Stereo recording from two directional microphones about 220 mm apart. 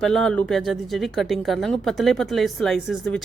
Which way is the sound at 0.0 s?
Centre (ahead or behind).